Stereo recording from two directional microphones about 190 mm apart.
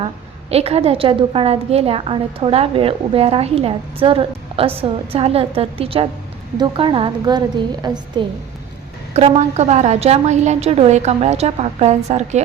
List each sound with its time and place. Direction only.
0.5 s a woman's voice: 30° right (ahead or behind)
9.1 s a woman's voice: 35° right (ahead or behind)